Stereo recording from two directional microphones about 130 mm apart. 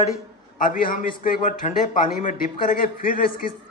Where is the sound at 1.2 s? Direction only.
90° left.